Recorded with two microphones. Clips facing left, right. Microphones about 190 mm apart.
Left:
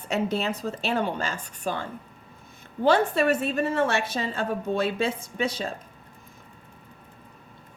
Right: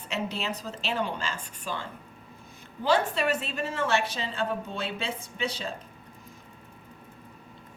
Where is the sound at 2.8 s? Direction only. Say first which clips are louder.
Left 4 dB; 50° left (ahead or behind).